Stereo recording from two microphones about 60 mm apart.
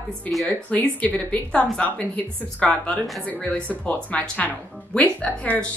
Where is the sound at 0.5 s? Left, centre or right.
Left.